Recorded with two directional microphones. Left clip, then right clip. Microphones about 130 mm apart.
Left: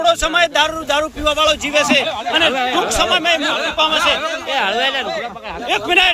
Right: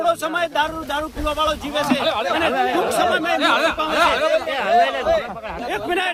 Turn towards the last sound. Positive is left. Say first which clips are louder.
# left 8 dB
turn(degrees=5)  # may be behind; listen again after turning